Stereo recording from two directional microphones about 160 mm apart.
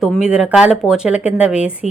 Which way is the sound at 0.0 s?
5° right (ahead or behind).